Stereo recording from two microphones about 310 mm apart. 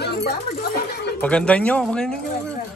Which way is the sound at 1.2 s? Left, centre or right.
Centre.